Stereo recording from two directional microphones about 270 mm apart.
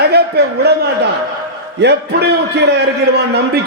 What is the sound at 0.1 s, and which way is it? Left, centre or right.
A man's voice, right.